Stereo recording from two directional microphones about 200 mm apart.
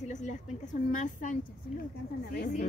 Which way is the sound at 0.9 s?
40° left (ahead or behind).